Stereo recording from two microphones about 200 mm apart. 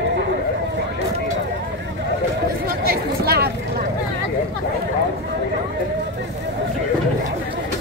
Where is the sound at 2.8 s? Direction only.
50° right (ahead or behind).